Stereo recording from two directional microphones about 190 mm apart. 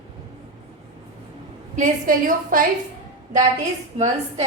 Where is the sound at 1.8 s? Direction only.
45° right (ahead or behind).